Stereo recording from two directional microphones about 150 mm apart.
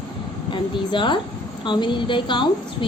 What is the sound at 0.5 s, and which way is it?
A woman's voice, 30° left (ahead or behind).